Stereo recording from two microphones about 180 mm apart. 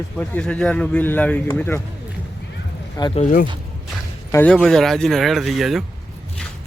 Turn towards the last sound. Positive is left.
turn(degrees=0)  # may be behind; listen again after turning